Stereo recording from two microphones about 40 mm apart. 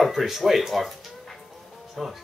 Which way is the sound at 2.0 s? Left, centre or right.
Centre.